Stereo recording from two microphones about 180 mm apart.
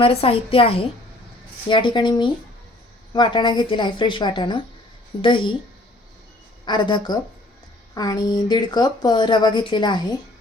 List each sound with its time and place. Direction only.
0.0 s a woman's voice: 35° left (ahead or behind)
6.7 s a woman's voice: 25° left (ahead or behind)